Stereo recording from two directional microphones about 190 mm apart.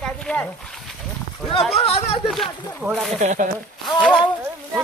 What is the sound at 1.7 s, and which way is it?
Speech, 30° left (ahead or behind).